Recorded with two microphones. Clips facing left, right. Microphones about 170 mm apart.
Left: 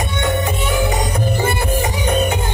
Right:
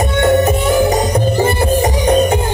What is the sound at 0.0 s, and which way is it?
Music, 40° right (ahead or behind).